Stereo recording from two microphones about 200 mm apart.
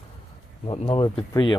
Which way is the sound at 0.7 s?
25° left (ahead or behind).